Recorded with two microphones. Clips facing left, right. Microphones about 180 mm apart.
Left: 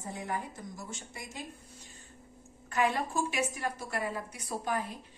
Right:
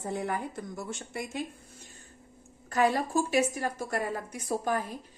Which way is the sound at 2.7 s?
40° right (ahead or behind).